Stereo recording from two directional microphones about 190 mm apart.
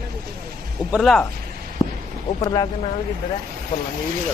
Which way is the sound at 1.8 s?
20° left (ahead or behind).